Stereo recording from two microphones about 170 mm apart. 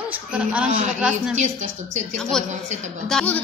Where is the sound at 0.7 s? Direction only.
45° right (ahead or behind).